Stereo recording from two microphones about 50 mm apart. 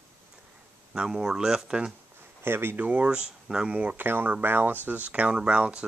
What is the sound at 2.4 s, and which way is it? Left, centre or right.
Speech, right.